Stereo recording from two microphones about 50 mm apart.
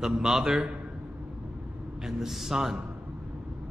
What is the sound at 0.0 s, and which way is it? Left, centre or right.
Speech, centre.